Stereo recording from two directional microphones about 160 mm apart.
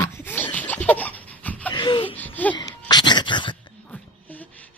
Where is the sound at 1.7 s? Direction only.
30° left (ahead or behind).